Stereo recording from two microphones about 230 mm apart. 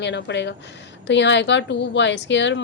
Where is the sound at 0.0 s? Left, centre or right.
Left.